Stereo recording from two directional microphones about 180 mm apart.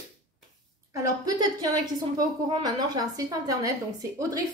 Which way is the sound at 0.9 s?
20° right (ahead or behind).